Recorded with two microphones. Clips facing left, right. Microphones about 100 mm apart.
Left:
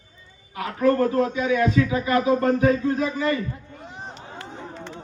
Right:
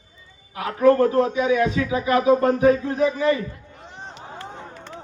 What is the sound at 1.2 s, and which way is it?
A man's voice, 15° right (ahead or behind).